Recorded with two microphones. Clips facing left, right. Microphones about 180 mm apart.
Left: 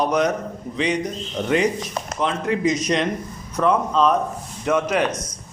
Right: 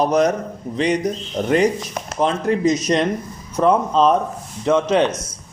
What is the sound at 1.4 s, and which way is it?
A man's voice, 45° right (ahead or behind).